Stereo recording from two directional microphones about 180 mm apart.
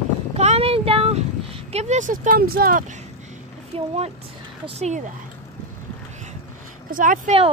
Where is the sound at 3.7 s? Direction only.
30° right (ahead or behind).